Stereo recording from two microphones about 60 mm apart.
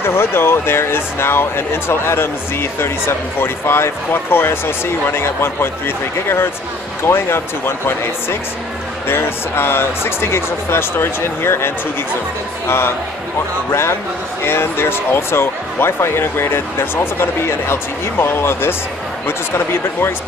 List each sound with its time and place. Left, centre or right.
0.0 s speech: left